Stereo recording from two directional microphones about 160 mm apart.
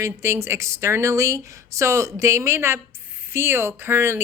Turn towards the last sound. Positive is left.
turn(degrees=-15)  # may be behind; listen again after turning